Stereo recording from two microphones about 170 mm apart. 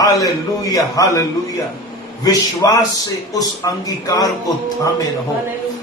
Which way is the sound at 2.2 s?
20° left (ahead or behind).